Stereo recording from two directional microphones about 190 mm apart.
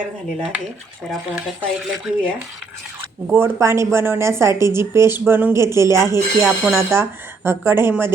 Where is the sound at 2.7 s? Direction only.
10° right (ahead or behind).